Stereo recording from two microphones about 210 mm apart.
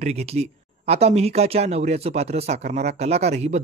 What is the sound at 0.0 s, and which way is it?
Speech, 30° right (ahead or behind).